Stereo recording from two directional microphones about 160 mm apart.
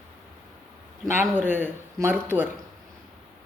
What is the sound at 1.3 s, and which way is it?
Speech, 10° right (ahead or behind).